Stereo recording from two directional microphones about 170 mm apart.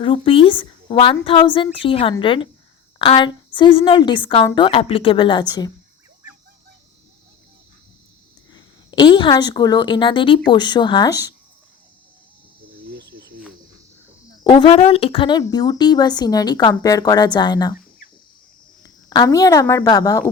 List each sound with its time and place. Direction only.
0.0 s a woman's voice: 30° left (ahead or behind)
8.5 s a woman's voice: 25° left (ahead or behind)
12.8 s cricket: 75° right (ahead or behind)
14.4 s a woman's voice: 30° left (ahead or behind)
18.8 s speech: 25° left (ahead or behind)